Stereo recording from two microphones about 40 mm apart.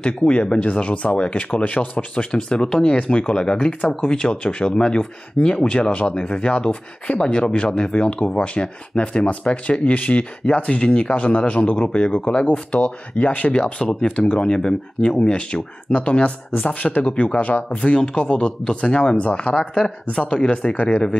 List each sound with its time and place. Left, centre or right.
0.0 s speech: left
1.5 s speech: left
2.3 s speech: centre; by 10.2 s left
10.4 s speech: left
13.5 s speech: left
17.1 s speech: left
17.4 s speech: left
17.7 s speech: left